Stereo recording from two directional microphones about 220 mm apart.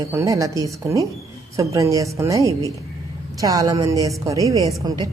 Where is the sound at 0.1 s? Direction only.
15° right (ahead or behind).